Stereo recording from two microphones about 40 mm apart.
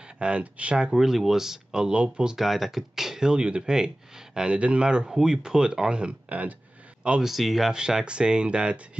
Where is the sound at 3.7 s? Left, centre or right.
Centre; by 6.5 s right.